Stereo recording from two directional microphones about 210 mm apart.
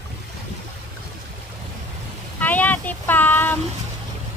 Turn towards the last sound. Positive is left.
turn(degrees=10)  # may be behind; listen again after turning